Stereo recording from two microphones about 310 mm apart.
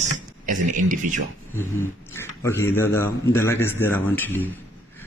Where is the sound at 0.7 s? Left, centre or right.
Right.